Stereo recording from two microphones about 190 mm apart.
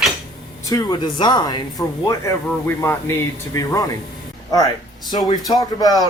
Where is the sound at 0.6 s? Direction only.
20° left (ahead or behind).